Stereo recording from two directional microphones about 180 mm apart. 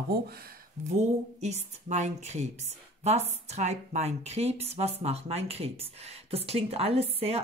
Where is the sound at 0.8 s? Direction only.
40° right (ahead or behind).